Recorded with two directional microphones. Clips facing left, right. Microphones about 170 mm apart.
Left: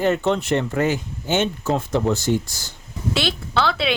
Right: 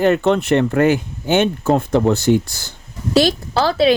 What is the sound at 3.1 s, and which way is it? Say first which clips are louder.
Speech: right 8 dB; 40° right (ahead or behind).